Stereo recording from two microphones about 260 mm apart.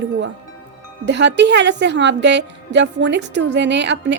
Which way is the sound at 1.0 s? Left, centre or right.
Right.